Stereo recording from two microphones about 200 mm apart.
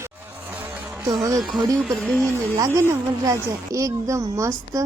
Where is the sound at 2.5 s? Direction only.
15° right (ahead or behind).